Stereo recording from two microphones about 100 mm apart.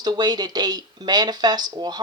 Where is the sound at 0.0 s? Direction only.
45° right (ahead or behind).